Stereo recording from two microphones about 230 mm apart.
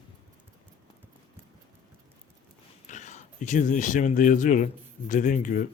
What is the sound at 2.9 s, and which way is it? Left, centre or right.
Speech, left.